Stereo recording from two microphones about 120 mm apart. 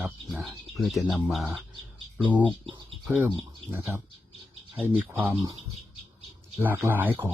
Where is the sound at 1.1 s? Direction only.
Centre (ahead or behind).